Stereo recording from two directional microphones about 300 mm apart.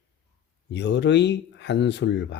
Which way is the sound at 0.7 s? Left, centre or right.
Left.